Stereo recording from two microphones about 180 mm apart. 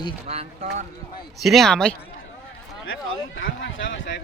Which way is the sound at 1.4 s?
Centre (ahead or behind).